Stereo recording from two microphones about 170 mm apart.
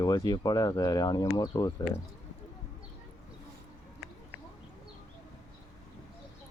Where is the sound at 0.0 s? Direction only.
25° left (ahead or behind).